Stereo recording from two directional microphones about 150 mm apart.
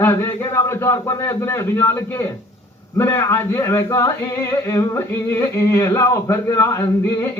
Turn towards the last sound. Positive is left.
turn(degrees=20)  # may be behind; listen again after turning